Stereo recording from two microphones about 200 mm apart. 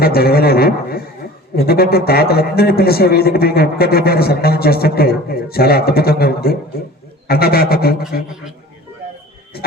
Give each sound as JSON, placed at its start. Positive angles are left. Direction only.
{"t": 0.0, "sound": "a man's voice", "side_deg": 50}
{"t": 9.5, "sound": "speech", "side_deg": 50}